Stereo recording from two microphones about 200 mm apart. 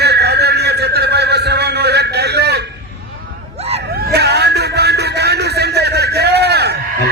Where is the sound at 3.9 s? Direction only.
50° right (ahead or behind).